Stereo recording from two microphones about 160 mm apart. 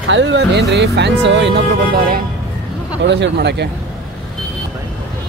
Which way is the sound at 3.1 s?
90° right.